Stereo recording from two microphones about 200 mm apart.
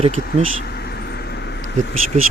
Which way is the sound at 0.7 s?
55° left (ahead or behind).